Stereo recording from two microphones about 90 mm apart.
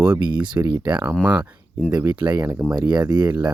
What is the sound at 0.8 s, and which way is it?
Speech, 20° right (ahead or behind).